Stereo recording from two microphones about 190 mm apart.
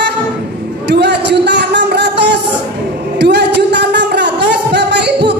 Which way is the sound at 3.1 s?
60° right (ahead or behind).